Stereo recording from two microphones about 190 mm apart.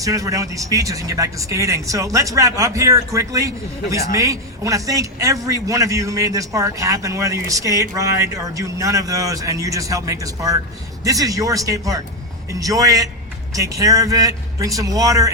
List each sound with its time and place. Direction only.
0.0 s a man's voice: 15° right (ahead or behind)